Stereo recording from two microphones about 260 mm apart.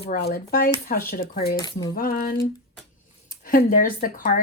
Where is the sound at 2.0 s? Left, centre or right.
Left.